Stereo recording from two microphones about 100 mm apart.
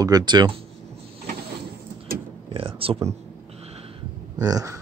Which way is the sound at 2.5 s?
65° right (ahead or behind).